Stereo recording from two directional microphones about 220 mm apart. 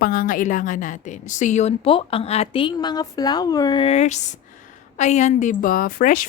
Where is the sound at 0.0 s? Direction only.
40° left (ahead or behind).